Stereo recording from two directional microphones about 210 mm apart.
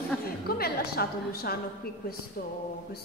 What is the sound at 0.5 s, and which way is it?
A woman's voice, 50° left (ahead or behind).